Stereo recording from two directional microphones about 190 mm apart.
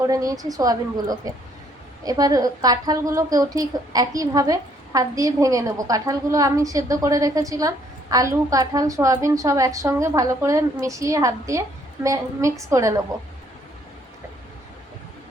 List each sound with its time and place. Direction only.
0.0 s a woman's voice: 20° right (ahead or behind)